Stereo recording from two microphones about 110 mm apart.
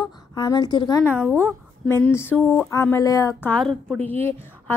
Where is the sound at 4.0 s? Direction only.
20° left (ahead or behind).